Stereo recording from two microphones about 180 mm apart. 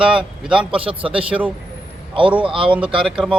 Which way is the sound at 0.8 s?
30° right (ahead or behind).